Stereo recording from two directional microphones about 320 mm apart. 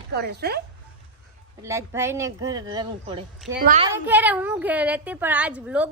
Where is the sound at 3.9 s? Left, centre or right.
Centre.